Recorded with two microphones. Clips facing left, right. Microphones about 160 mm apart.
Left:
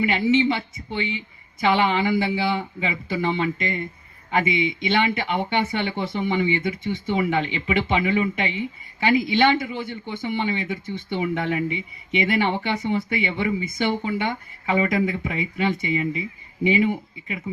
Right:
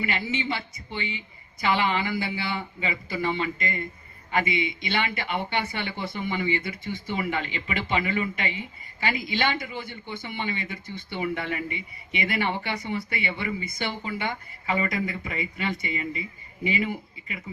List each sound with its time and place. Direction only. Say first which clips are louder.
0.0 s speech: left 10 dB; 25° left (ahead or behind)